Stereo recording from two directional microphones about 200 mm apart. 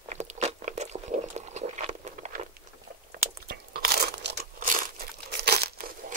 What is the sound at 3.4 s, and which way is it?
Crunch, 50° right (ahead or behind).